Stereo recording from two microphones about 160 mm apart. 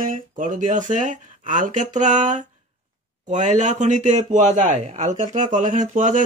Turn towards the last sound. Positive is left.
turn(degrees=-50)  # may be behind; listen again after turning